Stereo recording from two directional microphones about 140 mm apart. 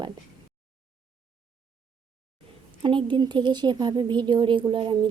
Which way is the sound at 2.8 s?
35° right (ahead or behind).